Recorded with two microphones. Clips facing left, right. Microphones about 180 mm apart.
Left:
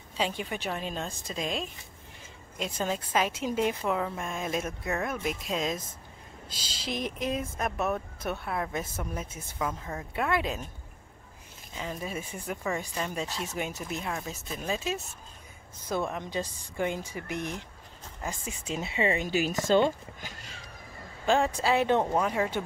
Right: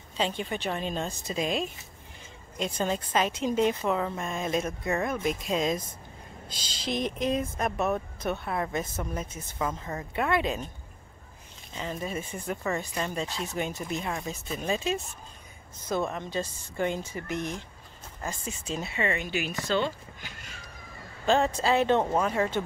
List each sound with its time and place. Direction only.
0.2 s speech: 5° left (ahead or behind)
11.7 s speech: 5° left (ahead or behind); by 19.1 s 25° left (ahead or behind)
19.2 s a woman's voice: 40° left (ahead or behind)
21.3 s speech: 10° left (ahead or behind)